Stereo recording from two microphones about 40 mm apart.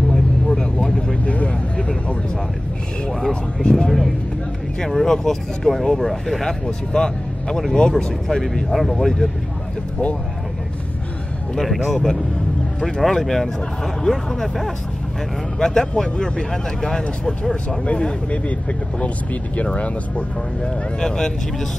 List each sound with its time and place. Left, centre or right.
0.1 s vehicle: centre
1.2 s vehicle: left
3.1 s vehicle: centre
4.7 s speech: centre
6.4 s speech: centre
11.5 s speech: centre
11.9 s speech: centre; by 20.7 s left
21.0 s speech: centre